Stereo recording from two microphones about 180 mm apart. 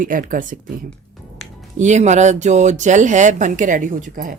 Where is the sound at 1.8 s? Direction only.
40° right (ahead or behind).